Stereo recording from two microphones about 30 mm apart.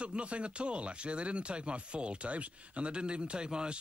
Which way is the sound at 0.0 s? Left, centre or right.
Right.